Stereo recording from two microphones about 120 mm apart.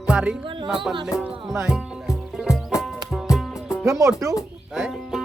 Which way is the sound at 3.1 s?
Centre (ahead or behind).